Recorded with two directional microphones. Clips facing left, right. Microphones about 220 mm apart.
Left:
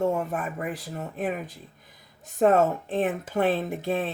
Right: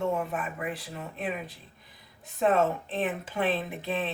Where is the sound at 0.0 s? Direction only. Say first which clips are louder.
Left 3 dB; 40° left (ahead or behind).